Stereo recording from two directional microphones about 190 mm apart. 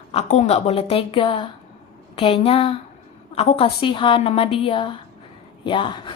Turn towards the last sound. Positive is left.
turn(degrees=25)  # may be behind; listen again after turning